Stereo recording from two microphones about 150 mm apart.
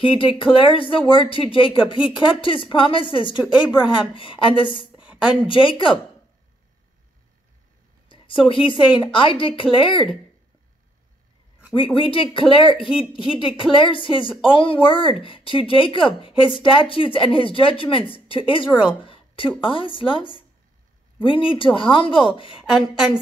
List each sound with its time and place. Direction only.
0.0 s speech: 35° left (ahead or behind)
3.5 s speech: 5° right (ahead or behind)
4.1 s speech: 35° left (ahead or behind)
5.0 s a sound: 5° right (ahead or behind)
5.5 s speech: 35° left (ahead or behind)
8.1 s speech: 35° left (ahead or behind)
11.7 s speech: 35° left (ahead or behind)
18.9 s a sound: 35° left (ahead or behind)
19.6 s speech: 35° left (ahead or behind)
22.7 s a woman's voice: centre (ahead or behind)